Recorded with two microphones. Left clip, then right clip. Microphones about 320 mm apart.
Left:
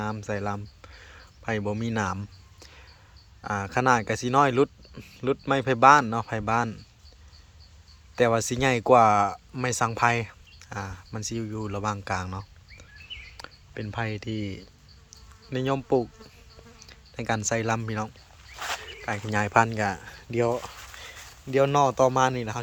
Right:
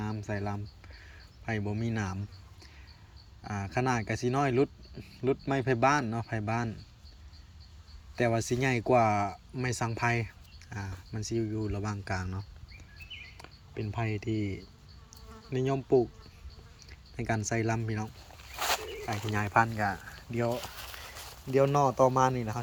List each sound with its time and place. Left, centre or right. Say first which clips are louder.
0.0 s speech: left 6 dB; centre
3.4 s speech: left 8 dB; centre
8.1 s speech: left 6 dB; centre
13.3 s a sound: left 3 dB; centre
15.4 s speech: left 3 dB; centre
17.2 s speech: left 5 dB; centre
18.5 s a sound: right 2 dB; right
19.3 s speech: left 5 dB; centre
20.8 s a sound: left 2 dB; right
21.5 s speech: left 4 dB; centre